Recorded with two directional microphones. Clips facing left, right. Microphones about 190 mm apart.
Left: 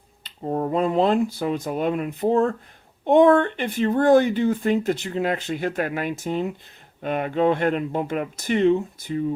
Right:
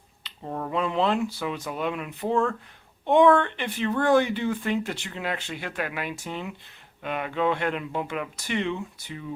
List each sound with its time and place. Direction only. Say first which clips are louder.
0.3 s speech: left 7 dB; 35° left (ahead or behind)